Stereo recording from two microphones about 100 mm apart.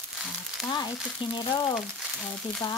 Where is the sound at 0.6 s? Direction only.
45° left (ahead or behind).